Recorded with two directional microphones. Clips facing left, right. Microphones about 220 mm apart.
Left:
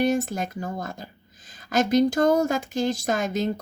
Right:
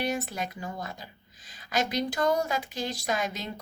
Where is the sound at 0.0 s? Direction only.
45° left (ahead or behind).